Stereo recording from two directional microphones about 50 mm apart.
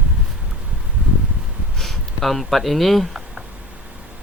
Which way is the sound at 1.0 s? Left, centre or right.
Right.